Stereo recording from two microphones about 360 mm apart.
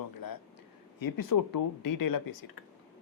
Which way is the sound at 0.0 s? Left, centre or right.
Left.